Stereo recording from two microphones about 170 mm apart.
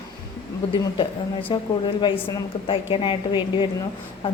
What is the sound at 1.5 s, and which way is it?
A woman's voice, 30° left (ahead or behind).